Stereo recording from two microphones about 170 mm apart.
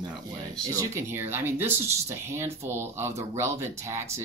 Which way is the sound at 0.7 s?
15° right (ahead or behind).